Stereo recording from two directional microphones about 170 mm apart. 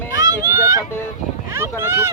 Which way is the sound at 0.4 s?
20° right (ahead or behind).